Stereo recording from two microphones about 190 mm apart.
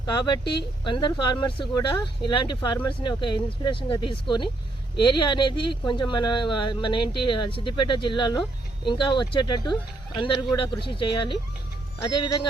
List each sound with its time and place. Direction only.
0.0 s speech: 25° left (ahead or behind)